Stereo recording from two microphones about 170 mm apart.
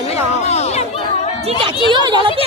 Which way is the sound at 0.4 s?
40° left (ahead or behind).